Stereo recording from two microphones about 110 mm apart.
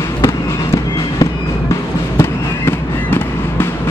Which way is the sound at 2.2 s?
20° left (ahead or behind).